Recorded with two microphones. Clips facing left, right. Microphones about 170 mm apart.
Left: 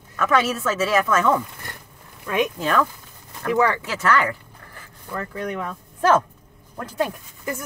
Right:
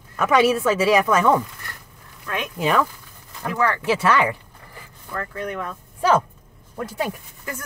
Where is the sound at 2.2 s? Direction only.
15° left (ahead or behind).